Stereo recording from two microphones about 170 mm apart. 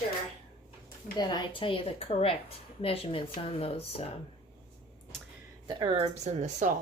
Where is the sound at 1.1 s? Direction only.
25° left (ahead or behind).